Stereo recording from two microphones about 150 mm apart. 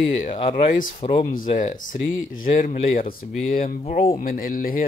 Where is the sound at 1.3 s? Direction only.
60° left (ahead or behind).